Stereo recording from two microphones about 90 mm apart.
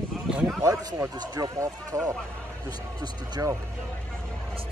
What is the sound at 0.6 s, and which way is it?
Speech, 35° right (ahead or behind).